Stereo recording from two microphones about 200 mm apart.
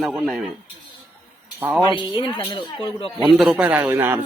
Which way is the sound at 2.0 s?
25° left (ahead or behind).